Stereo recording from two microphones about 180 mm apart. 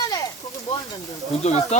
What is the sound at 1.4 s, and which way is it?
Speech, 40° left (ahead or behind).